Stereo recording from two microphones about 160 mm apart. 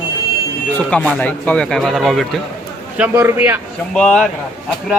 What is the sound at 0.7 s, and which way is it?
Speech, 10° left (ahead or behind).